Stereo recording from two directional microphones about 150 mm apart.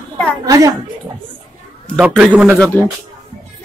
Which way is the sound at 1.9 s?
5° right (ahead or behind).